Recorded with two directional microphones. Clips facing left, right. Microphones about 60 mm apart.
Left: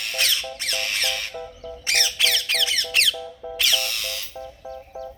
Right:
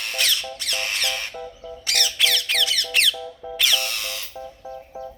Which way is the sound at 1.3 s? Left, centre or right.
Centre.